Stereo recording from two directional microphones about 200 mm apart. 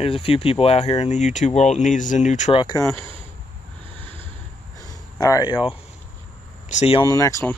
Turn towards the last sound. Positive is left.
turn(degrees=15)  # may be behind; listen again after turning